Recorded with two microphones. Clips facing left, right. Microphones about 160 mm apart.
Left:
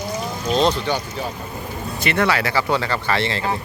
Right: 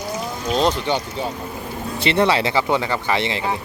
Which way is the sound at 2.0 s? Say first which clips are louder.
Right 2 dB; 25° right (ahead or behind).